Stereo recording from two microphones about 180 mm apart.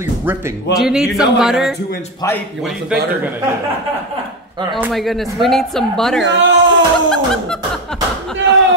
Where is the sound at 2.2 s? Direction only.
20° left (ahead or behind).